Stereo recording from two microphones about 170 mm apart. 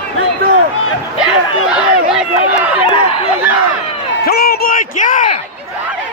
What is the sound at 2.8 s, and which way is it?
Chatter, 30° left (ahead or behind).